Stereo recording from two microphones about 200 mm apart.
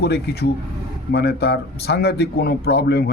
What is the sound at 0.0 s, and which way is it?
Speech, 55° left (ahead or behind).